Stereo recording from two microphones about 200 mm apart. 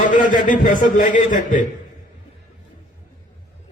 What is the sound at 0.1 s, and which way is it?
A man's voice, 40° left (ahead or behind).